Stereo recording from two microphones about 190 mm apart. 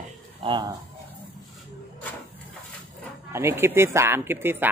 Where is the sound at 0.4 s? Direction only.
20° right (ahead or behind).